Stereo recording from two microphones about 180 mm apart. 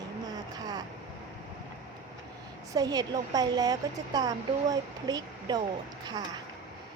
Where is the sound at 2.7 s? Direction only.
20° right (ahead or behind).